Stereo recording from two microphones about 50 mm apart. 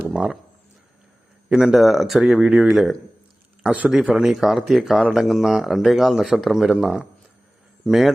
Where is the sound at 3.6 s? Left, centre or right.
Right.